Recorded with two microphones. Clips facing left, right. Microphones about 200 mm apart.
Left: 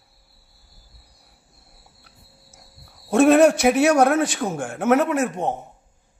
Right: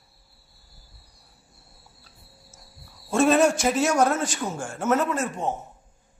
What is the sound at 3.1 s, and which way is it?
A woman's voice, 65° left (ahead or behind).